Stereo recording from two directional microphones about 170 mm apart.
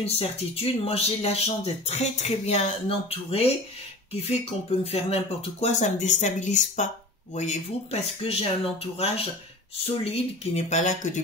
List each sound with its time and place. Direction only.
0.0 s speech: 35° left (ahead or behind)